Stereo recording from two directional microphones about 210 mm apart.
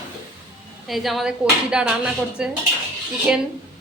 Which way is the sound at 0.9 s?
Centre (ahead or behind).